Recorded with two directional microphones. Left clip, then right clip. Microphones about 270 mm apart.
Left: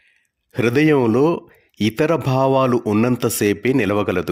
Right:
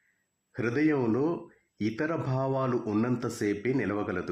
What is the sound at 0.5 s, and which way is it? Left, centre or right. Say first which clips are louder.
Speech: left 12 dB; left.